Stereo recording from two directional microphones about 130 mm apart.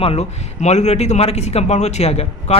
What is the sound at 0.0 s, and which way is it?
Speech, 55° left (ahead or behind).